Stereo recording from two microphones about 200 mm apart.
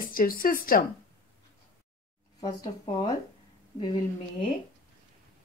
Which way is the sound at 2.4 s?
20° left (ahead or behind).